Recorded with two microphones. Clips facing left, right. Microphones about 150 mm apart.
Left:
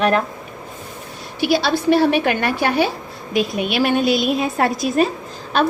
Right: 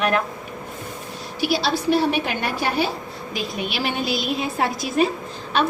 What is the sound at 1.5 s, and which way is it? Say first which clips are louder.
A woman's voice: left 4 dB; 60° left (ahead or behind).